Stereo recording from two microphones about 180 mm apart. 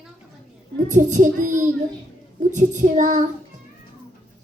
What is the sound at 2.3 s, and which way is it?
Child singing, 45° right (ahead or behind).